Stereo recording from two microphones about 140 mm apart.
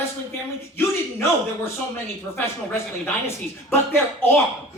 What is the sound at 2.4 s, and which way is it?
A man's voice, 15° left (ahead or behind).